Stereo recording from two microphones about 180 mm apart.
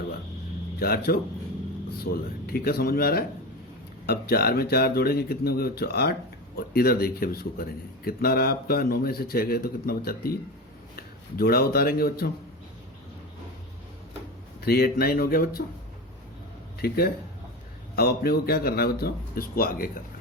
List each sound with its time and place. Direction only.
0.8 s speech: 60° left (ahead or behind)
14.6 s speech: 60° left (ahead or behind)
16.8 s speech: 60° left (ahead or behind)